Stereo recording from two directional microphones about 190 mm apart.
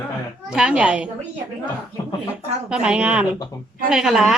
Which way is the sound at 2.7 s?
5° right (ahead or behind).